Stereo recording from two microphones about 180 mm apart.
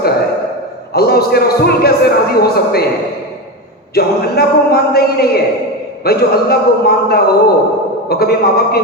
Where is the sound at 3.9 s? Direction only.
60° left (ahead or behind).